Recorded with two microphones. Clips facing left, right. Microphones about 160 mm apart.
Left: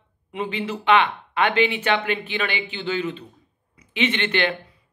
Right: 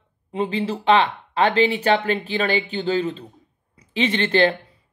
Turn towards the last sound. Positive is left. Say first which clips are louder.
# right 4 dB
turn(degrees=-35)  # may be behind; listen again after turning